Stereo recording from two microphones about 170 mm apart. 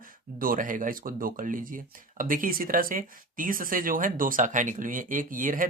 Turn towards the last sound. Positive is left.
turn(degrees=-50)  # may be behind; listen again after turning